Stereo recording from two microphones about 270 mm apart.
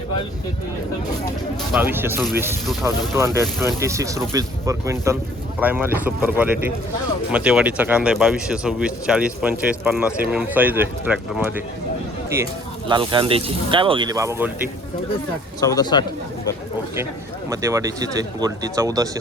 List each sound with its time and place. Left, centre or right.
1.7 s speech: centre
15.6 s a man's voice: centre
17.5 s speech: centre